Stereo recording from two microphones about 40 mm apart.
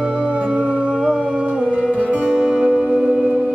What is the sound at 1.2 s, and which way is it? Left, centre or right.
Music, right.